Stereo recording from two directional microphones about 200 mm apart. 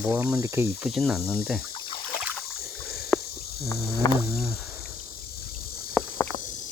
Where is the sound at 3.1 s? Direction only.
Centre (ahead or behind).